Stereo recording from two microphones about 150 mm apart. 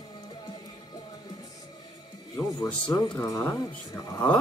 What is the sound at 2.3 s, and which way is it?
Speech, 20° left (ahead or behind).